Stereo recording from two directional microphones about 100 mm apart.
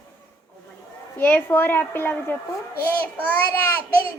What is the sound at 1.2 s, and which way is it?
A woman's voice, 20° left (ahead or behind).